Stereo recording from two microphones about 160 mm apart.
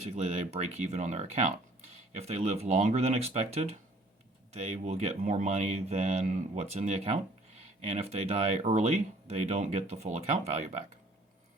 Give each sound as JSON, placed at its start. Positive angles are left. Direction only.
{"t": 0.0, "sound": "speech", "side_deg": -40}